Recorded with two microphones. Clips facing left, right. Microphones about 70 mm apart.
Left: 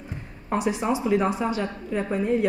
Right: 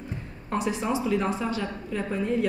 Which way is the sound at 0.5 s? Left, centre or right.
Centre.